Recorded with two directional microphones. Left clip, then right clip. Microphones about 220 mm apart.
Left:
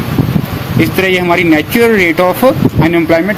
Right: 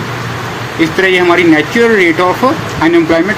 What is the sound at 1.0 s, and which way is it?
A man's voice, 50° left (ahead or behind).